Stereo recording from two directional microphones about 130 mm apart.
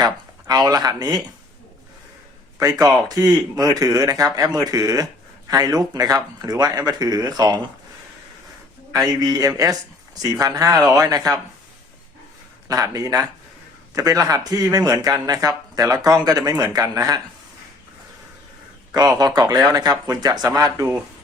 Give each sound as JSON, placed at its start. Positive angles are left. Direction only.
{"t": 0.0, "sound": "speech", "side_deg": -30}
{"t": 2.6, "sound": "speech", "side_deg": -30}
{"t": 8.9, "sound": "speech", "side_deg": -30}
{"t": 12.6, "sound": "speech", "side_deg": -25}
{"t": 18.9, "sound": "speech", "side_deg": -30}